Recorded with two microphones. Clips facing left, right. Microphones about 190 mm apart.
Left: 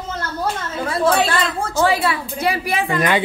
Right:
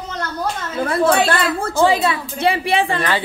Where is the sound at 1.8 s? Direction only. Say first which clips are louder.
Right 2 dB; 20° right (ahead or behind).